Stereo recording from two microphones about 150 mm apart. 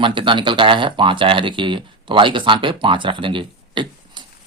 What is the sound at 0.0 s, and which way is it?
Speech, 35° right (ahead or behind).